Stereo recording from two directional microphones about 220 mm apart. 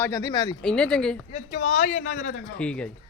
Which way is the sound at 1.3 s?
35° left (ahead or behind).